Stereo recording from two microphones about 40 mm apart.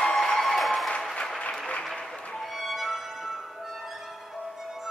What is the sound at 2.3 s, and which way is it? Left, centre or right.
Music, centre.